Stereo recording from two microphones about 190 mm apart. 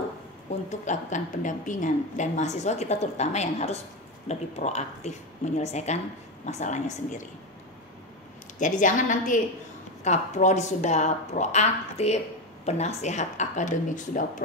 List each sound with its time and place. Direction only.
0.7 s a woman's voice: 40° left (ahead or behind)
8.5 s a woman's voice: 40° left (ahead or behind)